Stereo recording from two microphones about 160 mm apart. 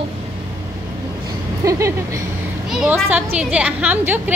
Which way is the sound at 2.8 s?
10° right (ahead or behind).